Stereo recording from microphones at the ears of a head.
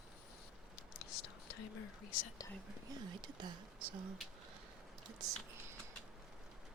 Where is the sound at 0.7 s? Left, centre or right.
Left.